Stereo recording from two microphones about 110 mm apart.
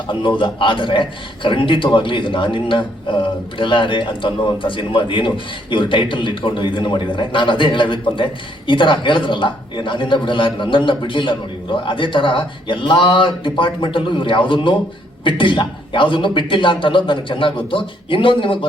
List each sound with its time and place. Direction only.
0.1 s a man's voice: 50° left (ahead or behind)